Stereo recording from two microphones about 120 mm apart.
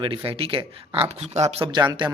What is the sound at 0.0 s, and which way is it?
Speech, 45° right (ahead or behind).